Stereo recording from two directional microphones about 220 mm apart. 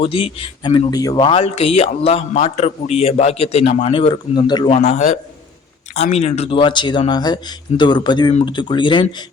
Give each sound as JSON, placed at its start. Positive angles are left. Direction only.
{"t": 0.0, "sound": "speech", "side_deg": 25}